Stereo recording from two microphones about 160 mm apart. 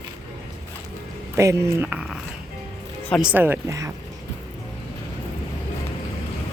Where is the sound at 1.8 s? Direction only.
5° right (ahead or behind).